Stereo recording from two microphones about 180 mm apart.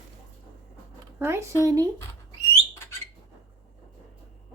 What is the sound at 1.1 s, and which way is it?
Speech, 15° right (ahead or behind).